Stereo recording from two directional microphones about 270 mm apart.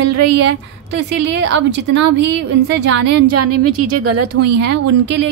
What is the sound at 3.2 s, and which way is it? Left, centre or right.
A woman's voice, right.